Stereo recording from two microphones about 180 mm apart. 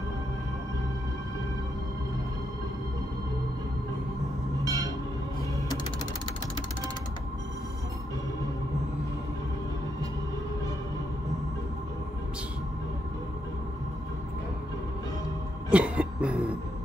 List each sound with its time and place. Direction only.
4.6 s train: 20° right (ahead or behind)
15.7 s cough: 5° right (ahead or behind)